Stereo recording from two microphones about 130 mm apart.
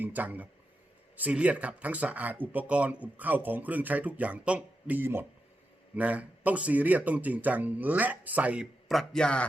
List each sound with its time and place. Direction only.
0.0 s speech: 15° right (ahead or behind)
8.9 s a man's voice: 5° left (ahead or behind)